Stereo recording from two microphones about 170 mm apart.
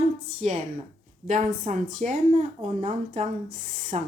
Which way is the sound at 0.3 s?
40° right (ahead or behind).